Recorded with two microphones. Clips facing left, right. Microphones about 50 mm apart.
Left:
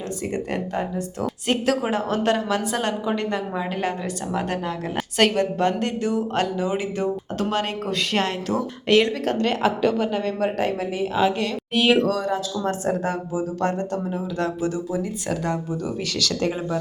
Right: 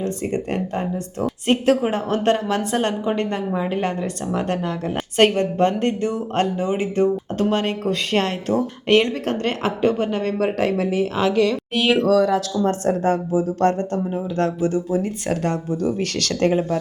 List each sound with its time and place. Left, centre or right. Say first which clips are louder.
0.0 s a woman's voice: right 4 dB; right
5.1 s a woman's voice: right 3 dB; right
10.6 s speech: right 4 dB; right
11.7 s a woman's voice: left 1 dB; centre
12.9 s a woman's voice: right 5 dB; right
14.4 s speech: right 5 dB; right